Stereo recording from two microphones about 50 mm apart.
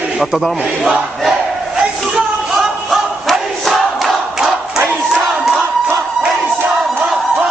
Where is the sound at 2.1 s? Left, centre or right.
Centre.